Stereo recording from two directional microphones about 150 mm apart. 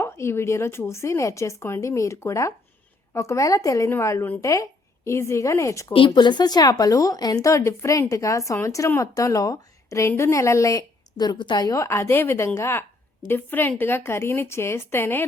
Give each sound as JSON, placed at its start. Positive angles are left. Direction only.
{"t": 0.0, "sound": "speech", "side_deg": 15}
{"t": 6.1, "sound": "a woman's voice", "side_deg": 30}